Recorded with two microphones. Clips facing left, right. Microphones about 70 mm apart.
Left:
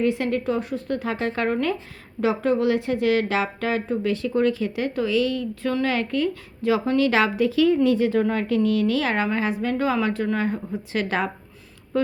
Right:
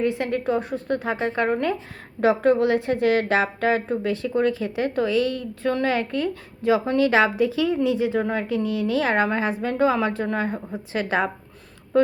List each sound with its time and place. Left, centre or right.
0.0 s a woman's voice: right
2.2 s a woman's voice: right